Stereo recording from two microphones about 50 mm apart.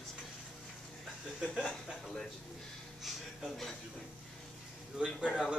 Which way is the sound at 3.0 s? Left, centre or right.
Centre.